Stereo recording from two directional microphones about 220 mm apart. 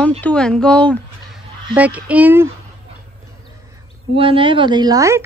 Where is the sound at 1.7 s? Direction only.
5° right (ahead or behind).